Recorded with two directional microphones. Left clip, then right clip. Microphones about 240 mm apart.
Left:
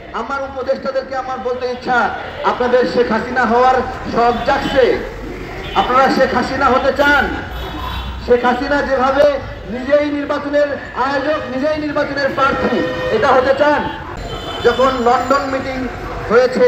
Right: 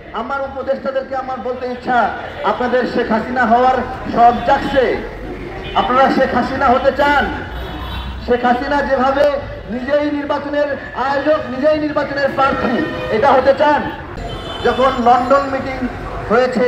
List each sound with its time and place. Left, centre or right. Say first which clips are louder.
0.1 s a man's voice: even; left
5.9 s a man's voice: left 1 dB; left
8.3 s a man's voice: left 1 dB; left